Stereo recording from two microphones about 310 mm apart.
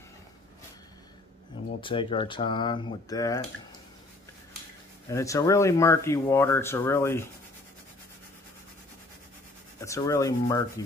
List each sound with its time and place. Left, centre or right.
1.8 s speech: centre
5.1 s speech: centre
9.8 s speech: centre